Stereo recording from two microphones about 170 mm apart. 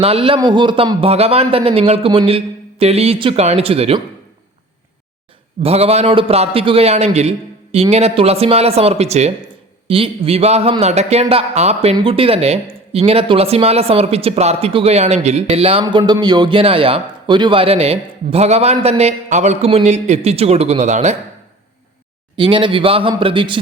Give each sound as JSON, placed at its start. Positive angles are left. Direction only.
{"t": 0.0, "sound": "a man's voice", "side_deg": -35}
{"t": 5.6, "sound": "a man's voice", "side_deg": -35}
{"t": 22.4, "sound": "a man's voice", "side_deg": -30}